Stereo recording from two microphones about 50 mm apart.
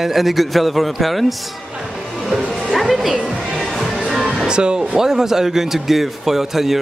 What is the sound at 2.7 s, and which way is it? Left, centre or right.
Speech, centre.